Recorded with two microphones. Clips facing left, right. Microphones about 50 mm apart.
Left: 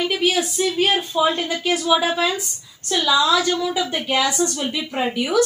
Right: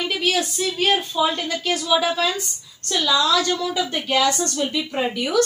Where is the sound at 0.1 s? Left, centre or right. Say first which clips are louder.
Left 2 dB; centre.